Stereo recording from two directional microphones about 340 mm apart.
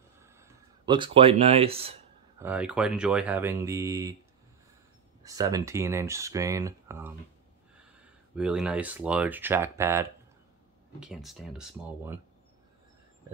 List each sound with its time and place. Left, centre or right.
0.2 s a sound: centre
2.4 s speech: centre
5.2 s speech: centre
8.4 s speech: centre